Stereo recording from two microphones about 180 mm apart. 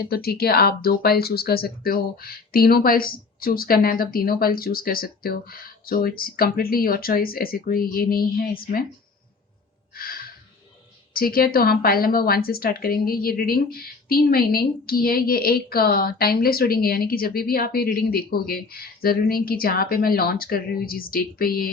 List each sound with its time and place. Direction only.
0.1 s a woman's voice: 60° left (ahead or behind)
9.9 s a sound: 55° left (ahead or behind)
11.1 s a woman's voice: 55° left (ahead or behind)